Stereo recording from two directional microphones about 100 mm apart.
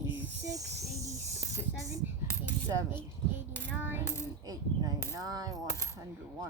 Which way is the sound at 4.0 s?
25° left (ahead or behind).